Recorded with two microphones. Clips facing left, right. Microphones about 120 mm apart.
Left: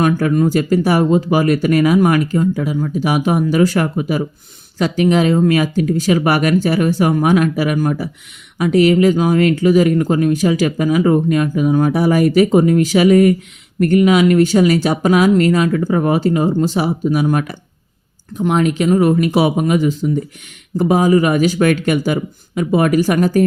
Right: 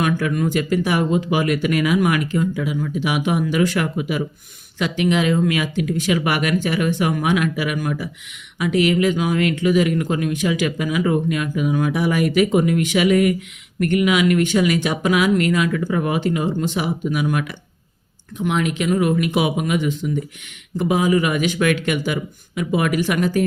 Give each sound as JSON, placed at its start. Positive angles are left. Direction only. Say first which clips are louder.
{"t": 0.0, "sound": "speech", "louder": "left 6 dB", "side_deg": 40}